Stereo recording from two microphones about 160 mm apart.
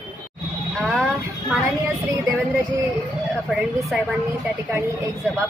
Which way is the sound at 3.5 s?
Centre (ahead or behind).